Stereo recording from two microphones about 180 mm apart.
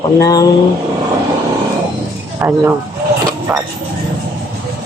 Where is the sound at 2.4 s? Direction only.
10° right (ahead or behind).